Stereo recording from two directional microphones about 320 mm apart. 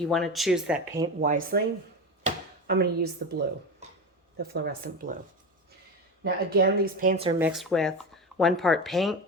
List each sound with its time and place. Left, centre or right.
0.0 s speech: centre
1.0 s speech: right
2.2 s chopping: right
4.4 s speech: right
6.2 s speech: right
7.3 s speech: centre